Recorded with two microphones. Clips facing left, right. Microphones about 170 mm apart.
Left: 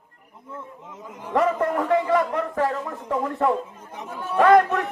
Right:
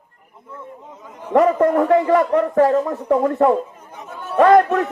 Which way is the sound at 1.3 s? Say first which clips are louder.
Right 7 dB; 40° right (ahead or behind).